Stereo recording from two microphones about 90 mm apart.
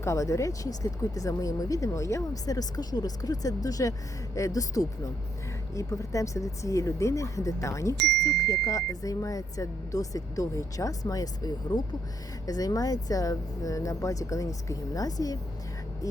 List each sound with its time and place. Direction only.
0.0 s speech: 35° left (ahead or behind)